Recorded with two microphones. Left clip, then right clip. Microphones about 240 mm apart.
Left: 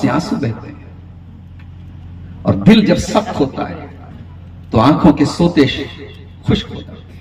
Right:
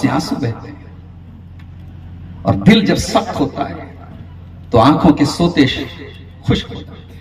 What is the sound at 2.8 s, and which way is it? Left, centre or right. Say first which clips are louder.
A man's voice: left 1 dB; right.